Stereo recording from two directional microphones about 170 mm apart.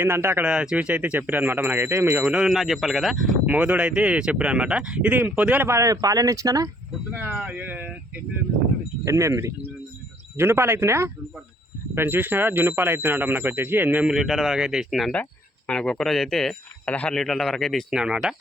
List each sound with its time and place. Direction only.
0.0 s speech: 15° right (ahead or behind)
2.2 s speech: 5° right (ahead or behind)